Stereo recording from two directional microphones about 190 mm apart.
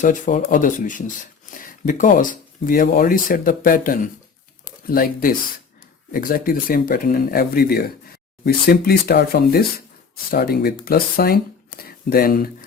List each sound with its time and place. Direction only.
0.0 s speech: 40° left (ahead or behind)